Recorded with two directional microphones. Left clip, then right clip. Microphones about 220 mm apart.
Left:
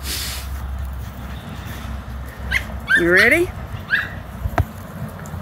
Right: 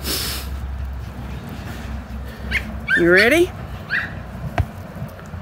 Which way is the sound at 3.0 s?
15° right (ahead or behind).